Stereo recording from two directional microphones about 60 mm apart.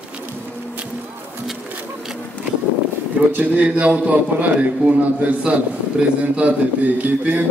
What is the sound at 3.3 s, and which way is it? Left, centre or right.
A man's voice, right.